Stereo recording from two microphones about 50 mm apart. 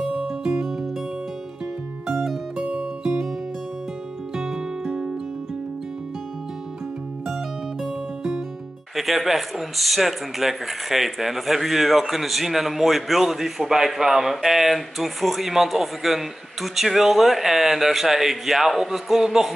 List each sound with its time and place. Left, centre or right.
0.3 s music: centre
2.1 s music: centre
2.6 s music: right
4.4 s music: centre
7.8 s music: centre
8.9 s speech: centre